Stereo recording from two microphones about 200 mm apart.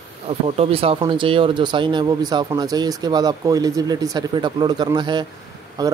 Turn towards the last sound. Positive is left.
turn(degrees=-20)  # may be behind; listen again after turning